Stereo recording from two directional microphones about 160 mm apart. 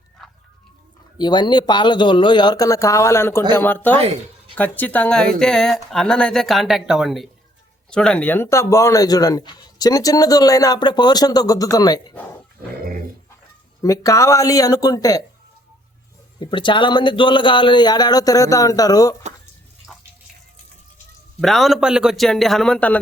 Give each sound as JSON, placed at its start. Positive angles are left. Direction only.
{"t": 0.2, "sound": "music", "side_deg": 0}
{"t": 1.2, "sound": "speech", "side_deg": 30}
{"t": 13.8, "sound": "speech", "side_deg": 20}
{"t": 16.4, "sound": "speech", "side_deg": 30}
{"t": 21.4, "sound": "speech", "side_deg": 0}